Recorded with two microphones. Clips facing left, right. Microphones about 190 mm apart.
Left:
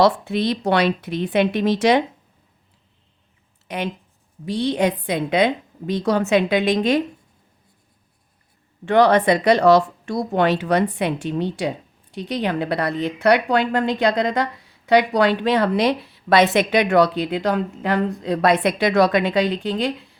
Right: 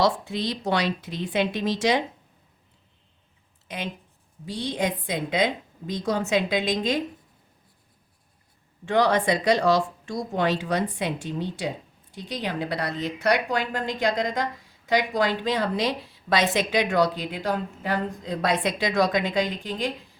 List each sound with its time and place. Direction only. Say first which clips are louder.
0.0 s a woman's voice: left 6 dB; 65° left (ahead or behind)
4.4 s a woman's voice: left 7 dB; 65° left (ahead or behind)
8.8 s a woman's voice: left 6 dB; 65° left (ahead or behind)